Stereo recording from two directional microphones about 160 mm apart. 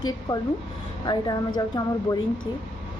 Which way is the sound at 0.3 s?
30° left (ahead or behind).